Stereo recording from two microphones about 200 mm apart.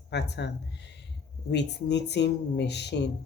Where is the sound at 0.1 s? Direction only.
60° left (ahead or behind).